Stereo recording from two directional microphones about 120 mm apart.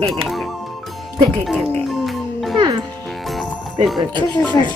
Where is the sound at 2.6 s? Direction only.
35° right (ahead or behind).